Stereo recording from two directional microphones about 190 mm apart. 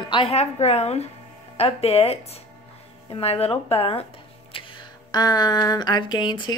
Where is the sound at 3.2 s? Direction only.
30° left (ahead or behind).